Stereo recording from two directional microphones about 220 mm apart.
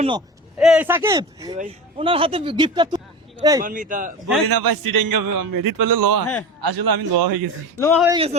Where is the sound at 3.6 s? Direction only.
35° right (ahead or behind).